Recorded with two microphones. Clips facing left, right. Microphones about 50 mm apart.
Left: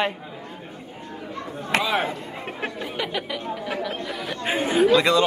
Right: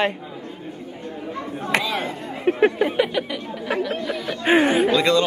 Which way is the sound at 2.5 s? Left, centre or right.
Right.